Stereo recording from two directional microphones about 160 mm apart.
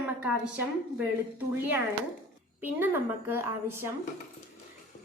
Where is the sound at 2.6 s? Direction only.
10° right (ahead or behind).